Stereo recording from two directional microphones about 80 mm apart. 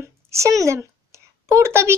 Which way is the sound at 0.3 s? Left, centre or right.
Right.